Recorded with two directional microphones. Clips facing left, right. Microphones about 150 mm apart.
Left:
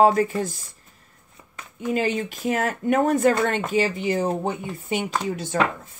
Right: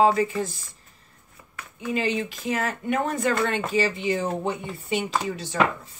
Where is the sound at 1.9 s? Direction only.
45° left (ahead or behind).